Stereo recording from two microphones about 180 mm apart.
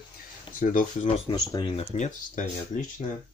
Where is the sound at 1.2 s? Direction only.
25° left (ahead or behind).